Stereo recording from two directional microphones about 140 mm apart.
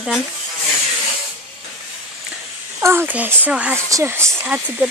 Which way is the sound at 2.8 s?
15° right (ahead or behind).